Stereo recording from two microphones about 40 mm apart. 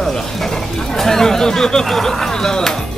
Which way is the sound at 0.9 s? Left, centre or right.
Centre.